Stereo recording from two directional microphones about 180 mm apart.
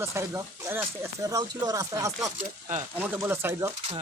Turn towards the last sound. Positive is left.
turn(degrees=-15)  # may be behind; listen again after turning